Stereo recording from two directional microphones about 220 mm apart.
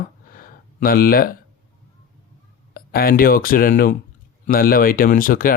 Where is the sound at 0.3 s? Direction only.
40° left (ahead or behind).